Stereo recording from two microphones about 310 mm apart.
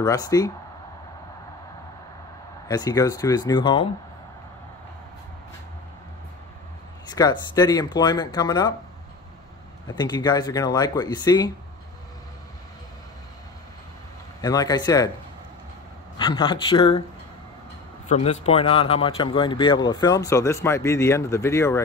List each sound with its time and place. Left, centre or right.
0.0 s speech: centre
2.7 s speech: centre
7.1 s speech: centre
9.8 s speech: centre
14.4 s speech: centre
16.2 s speech: centre
18.0 s speech: left